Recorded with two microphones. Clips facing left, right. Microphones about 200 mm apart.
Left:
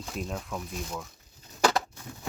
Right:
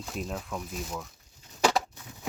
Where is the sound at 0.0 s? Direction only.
Centre (ahead or behind).